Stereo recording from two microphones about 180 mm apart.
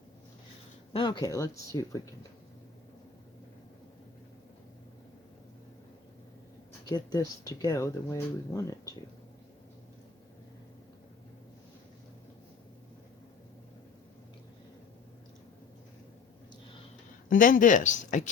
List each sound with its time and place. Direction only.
0.9 s speech: 25° left (ahead or behind)
6.8 s speech: 20° left (ahead or behind)
17.2 s speech: 50° left (ahead or behind)